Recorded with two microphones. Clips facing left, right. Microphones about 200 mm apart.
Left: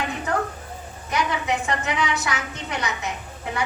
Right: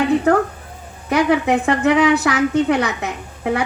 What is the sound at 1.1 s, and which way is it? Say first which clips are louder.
A woman's voice: right 9 dB; 60° right (ahead or behind).